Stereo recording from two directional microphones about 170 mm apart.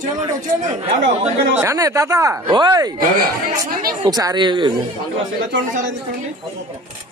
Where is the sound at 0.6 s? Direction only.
40° right (ahead or behind).